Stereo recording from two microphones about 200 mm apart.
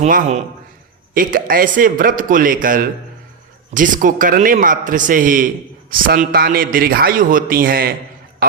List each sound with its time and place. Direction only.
0.0 s a man's voice: 35° right (ahead or behind)